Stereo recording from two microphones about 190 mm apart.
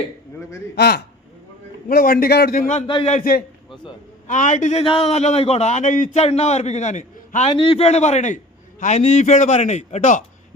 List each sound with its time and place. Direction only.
0.8 s a man's voice: 60° left (ahead or behind)
2.8 s a man's voice: 25° left (ahead or behind)
4.3 s a man's voice: 40° left (ahead or behind)
7.5 s a man's voice: 25° left (ahead or behind)